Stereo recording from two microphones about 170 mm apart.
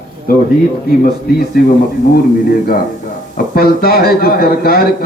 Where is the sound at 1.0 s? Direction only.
65° left (ahead or behind).